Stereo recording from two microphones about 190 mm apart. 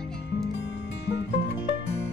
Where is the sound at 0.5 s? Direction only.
65° left (ahead or behind).